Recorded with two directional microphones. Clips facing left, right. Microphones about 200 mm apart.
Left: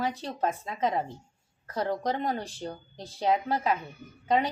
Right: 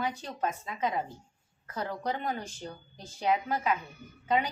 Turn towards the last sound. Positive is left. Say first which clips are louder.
# left 3 dB
turn(degrees=35)  # may be behind; listen again after turning